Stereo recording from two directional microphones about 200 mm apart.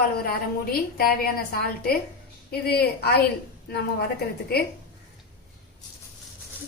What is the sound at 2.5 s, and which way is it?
Speech, 50° left (ahead or behind).